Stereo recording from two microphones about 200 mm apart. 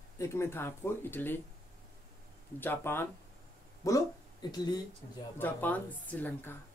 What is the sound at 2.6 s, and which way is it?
A woman's voice, 10° left (ahead or behind).